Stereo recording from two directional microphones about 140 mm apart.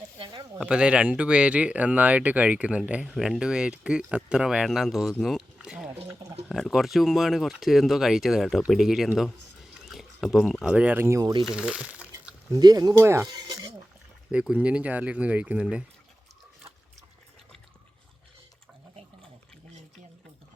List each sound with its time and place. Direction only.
0.2 s a sound: 30° right (ahead or behind)
0.6 s speech: 5° right (ahead or behind); by 11.4 s 25° right (ahead or behind)
11.4 s speech: 5° right (ahead or behind)
12.5 s speech: 25° right (ahead or behind)
13.2 s a sound: 30° right (ahead or behind)
14.3 s speech: 10° right (ahead or behind)